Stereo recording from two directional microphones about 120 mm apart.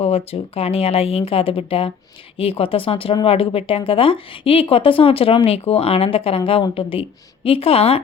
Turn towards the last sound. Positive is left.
turn(degrees=55)  # may be behind; listen again after turning